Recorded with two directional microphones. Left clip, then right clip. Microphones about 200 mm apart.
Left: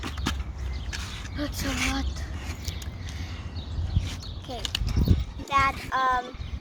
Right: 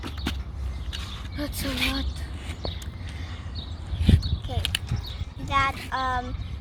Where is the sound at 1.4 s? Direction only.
30° right (ahead or behind).